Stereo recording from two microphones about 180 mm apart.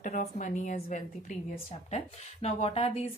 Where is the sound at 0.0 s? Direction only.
45° left (ahead or behind).